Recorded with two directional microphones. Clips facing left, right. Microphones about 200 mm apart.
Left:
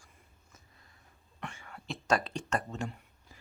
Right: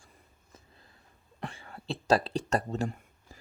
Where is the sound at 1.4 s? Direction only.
35° right (ahead or behind).